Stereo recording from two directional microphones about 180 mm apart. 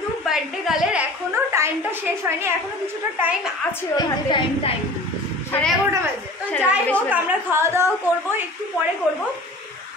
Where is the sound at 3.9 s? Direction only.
25° left (ahead or behind).